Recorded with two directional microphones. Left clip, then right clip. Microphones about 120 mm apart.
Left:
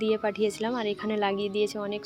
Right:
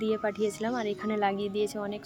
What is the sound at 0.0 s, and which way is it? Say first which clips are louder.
Speech: left 3 dB; 15° left (ahead or behind).